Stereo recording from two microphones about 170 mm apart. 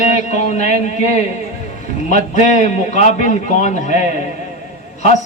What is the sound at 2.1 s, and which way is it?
A man's voice, 45° left (ahead or behind).